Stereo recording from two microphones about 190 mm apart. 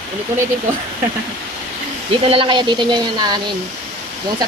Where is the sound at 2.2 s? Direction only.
25° right (ahead or behind).